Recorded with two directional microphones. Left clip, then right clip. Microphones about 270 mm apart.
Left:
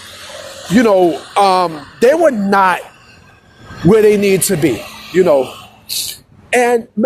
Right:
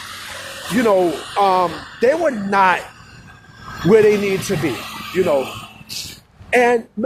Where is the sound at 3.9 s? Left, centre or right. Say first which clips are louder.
Left 3 dB; left.